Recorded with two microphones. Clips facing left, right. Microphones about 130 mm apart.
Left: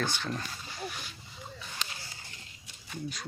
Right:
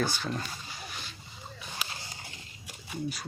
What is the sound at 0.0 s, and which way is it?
Speech, 10° right (ahead or behind).